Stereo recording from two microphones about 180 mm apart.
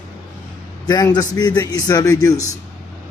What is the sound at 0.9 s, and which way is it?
Speech, 20° left (ahead or behind).